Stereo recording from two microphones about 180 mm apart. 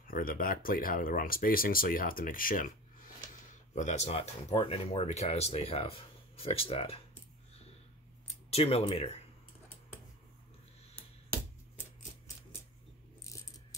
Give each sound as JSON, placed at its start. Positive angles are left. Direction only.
{"t": 0.1, "sound": "speech", "side_deg": 50}
{"t": 3.7, "sound": "speech", "side_deg": 40}
{"t": 8.5, "sound": "speech", "side_deg": 35}
{"t": 13.2, "sound": "coin", "side_deg": 20}